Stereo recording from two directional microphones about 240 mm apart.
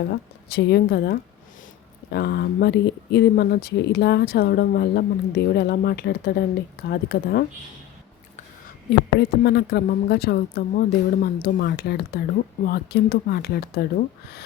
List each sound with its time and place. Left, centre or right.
0.1 s speech: left
9.1 s speech: left